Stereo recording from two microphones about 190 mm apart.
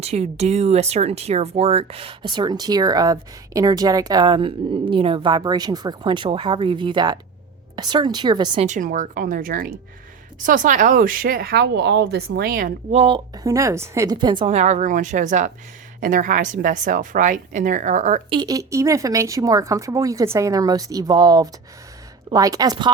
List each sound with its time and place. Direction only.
0.0 s speech: 35° right (ahead or behind)
8.6 s a woman's voice: 40° right (ahead or behind)
12.9 s speech: 30° right (ahead or behind)
14.4 s a woman's voice: 35° right (ahead or behind)
18.3 s speech: 20° right (ahead or behind)